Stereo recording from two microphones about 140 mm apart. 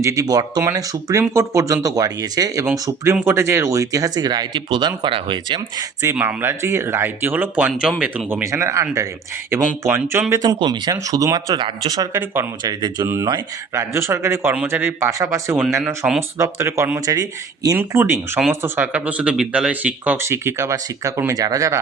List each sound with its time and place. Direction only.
0.0 s speech: 25° right (ahead or behind)
6.0 s speech: 15° right (ahead or behind)
12.2 s speech: 15° right (ahead or behind)
12.6 s speech: 30° right (ahead or behind)
13.1 s speech: 20° right (ahead or behind)
16.0 s speech: 10° right (ahead or behind)
16.4 s speech: 20° right (ahead or behind)
17.7 s speech: 15° right (ahead or behind)